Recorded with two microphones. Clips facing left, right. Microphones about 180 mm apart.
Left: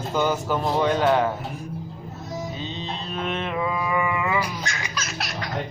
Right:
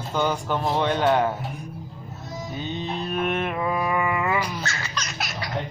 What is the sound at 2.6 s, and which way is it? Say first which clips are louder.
Music: right 3 dB; 25° left (ahead or behind).